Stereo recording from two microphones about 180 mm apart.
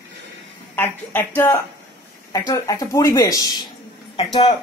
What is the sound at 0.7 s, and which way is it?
Speech, 10° left (ahead or behind).